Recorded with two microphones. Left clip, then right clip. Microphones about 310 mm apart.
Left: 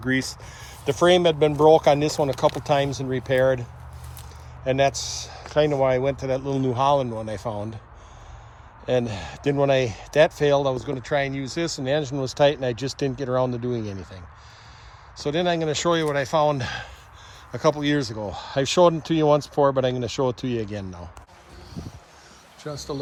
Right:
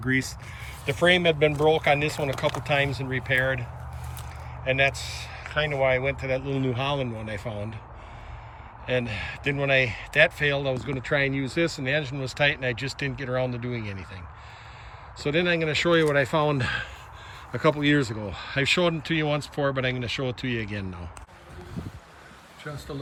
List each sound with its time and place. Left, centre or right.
0.0 s speech: centre
4.8 s speech: centre
5.7 s speech: left
6.0 s speech: centre
8.9 s speech: centre
15.2 s speech: centre